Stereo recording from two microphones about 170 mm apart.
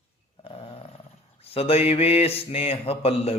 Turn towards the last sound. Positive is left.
turn(degrees=35)  # may be behind; listen again after turning